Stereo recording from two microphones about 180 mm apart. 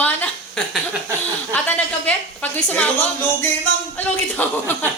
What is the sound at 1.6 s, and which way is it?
A woman's voice, 10° left (ahead or behind).